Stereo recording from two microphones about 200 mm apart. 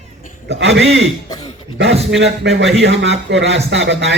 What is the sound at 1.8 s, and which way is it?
A man's voice, 65° right (ahead or behind).